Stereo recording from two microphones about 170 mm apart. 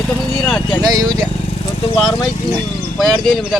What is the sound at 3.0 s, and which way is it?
Speech, centre (ahead or behind).